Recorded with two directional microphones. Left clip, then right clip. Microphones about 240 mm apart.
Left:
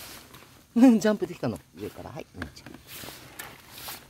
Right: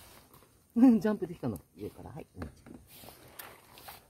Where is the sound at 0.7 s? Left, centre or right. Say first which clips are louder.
Left 5 dB; left.